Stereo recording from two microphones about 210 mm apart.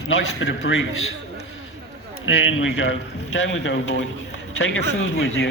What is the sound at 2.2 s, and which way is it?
A man's voice, 65° left (ahead or behind).